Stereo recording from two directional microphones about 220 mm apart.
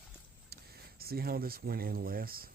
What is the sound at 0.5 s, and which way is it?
Speech, 45° right (ahead or behind).